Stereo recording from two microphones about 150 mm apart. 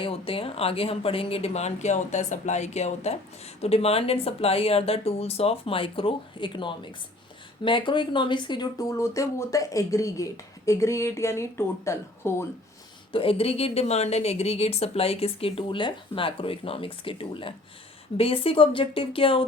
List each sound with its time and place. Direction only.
0.0 s speech: 40° left (ahead or behind); by 12.5 s 15° left (ahead or behind)
13.1 s speech: 35° left (ahead or behind)